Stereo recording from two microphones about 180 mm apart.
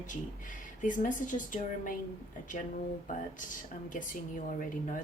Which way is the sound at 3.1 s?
45° left (ahead or behind).